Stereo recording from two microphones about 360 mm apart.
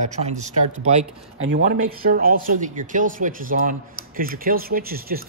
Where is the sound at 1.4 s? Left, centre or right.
Right.